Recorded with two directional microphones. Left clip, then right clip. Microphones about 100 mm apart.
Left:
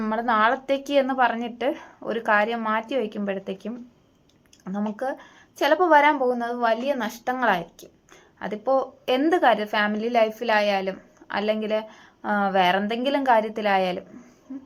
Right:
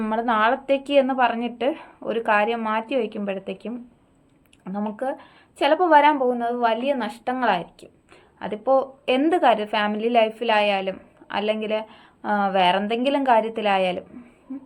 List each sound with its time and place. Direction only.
0.0 s a woman's voice: 30° right (ahead or behind)
4.9 s a woman's voice: 20° right (ahead or behind)